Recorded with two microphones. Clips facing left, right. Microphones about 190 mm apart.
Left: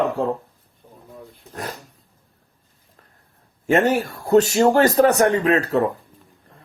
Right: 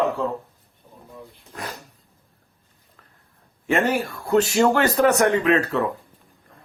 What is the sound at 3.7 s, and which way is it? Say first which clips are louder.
Speech: left 3 dB; 40° left (ahead or behind).